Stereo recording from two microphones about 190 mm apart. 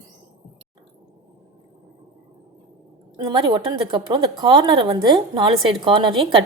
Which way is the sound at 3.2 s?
20° right (ahead or behind).